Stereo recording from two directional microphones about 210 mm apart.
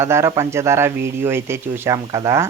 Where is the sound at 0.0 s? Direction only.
15° right (ahead or behind).